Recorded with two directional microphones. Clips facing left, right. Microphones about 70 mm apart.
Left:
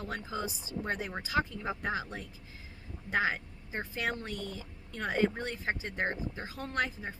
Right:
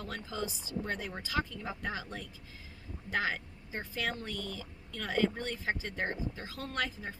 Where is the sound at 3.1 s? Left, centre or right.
Left.